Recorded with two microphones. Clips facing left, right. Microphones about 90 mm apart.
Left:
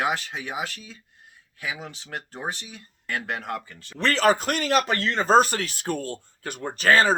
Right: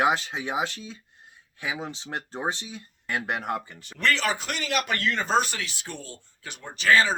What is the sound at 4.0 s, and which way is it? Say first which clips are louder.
Speech: left 5 dB; 40° left (ahead or behind).